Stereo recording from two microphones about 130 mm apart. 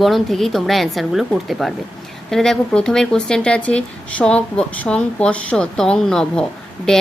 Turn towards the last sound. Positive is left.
turn(degrees=5)  # may be behind; listen again after turning